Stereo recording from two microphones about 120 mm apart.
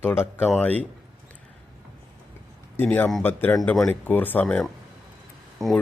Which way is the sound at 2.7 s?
15° left (ahead or behind).